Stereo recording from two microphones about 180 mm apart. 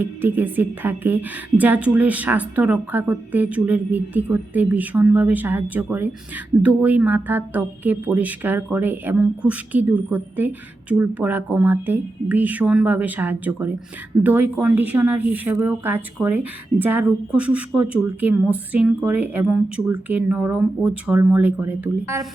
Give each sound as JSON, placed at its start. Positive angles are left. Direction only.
{"t": 0.0, "sound": "speech", "side_deg": -10}